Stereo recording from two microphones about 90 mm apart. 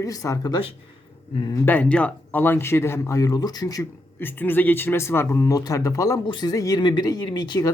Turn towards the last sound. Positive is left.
turn(degrees=50)  # may be behind; listen again after turning